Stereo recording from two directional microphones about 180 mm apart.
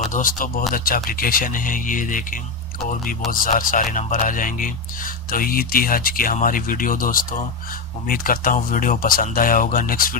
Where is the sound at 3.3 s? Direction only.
50° left (ahead or behind).